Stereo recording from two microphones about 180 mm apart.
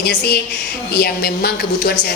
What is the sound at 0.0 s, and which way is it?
A woman's voice, 65° left (ahead or behind).